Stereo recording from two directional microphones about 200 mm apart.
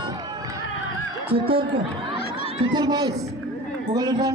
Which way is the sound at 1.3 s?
25° right (ahead or behind).